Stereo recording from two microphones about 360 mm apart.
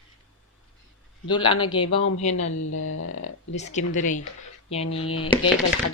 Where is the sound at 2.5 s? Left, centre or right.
Left.